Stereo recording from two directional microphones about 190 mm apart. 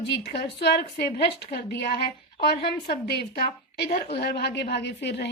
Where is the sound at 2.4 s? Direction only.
60° left (ahead or behind).